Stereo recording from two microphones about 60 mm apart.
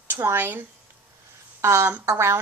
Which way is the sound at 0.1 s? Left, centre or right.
Right.